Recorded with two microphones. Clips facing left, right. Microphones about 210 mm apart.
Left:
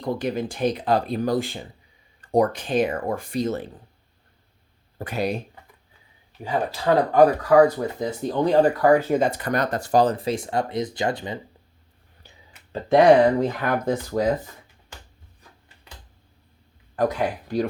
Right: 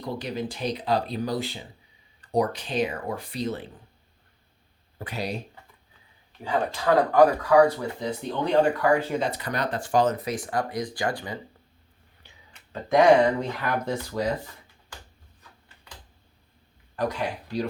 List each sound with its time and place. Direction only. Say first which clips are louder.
0.0 s speech: left 5 dB; 50° left (ahead or behind)
4.9 s speech: left 6 dB; 50° left (ahead or behind)
6.4 s speech: left 1 dB; 10° left (ahead or behind)
6.8 s speech: left 2 dB; 25° left (ahead or behind)
7.5 s speech: left 3 dB; 40° left (ahead or behind); by 11.3 s 25° left (ahead or behind)
13.6 s speech: left 4 dB; 50° left (ahead or behind)
16.9 s speech: left 5 dB; 50° left (ahead or behind)